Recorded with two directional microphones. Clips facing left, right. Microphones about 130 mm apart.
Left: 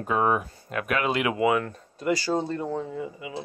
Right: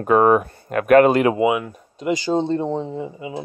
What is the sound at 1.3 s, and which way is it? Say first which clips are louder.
Speech: right 4 dB; 15° right (ahead or behind).